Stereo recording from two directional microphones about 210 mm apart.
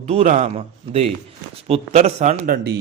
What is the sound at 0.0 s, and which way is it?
A man's voice, 35° right (ahead or behind).